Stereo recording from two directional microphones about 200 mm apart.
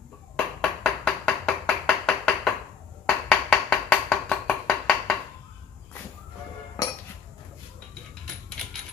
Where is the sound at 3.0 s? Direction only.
5° left (ahead or behind).